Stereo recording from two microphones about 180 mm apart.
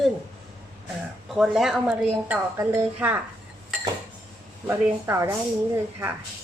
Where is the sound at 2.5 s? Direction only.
15° right (ahead or behind).